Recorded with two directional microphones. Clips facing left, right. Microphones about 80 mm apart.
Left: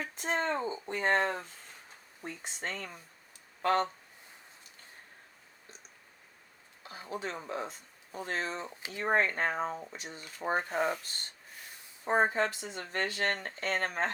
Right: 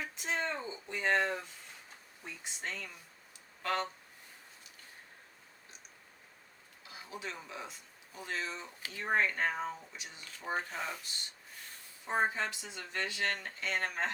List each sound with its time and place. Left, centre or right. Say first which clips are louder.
0.0 s speech: left 4 dB; left
6.8 s speech: left 6 dB; left